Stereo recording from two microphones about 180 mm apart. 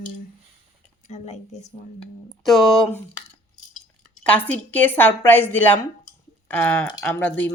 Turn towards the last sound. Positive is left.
turn(degrees=10)  # may be behind; listen again after turning